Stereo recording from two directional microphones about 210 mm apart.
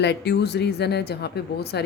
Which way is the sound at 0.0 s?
55° left (ahead or behind).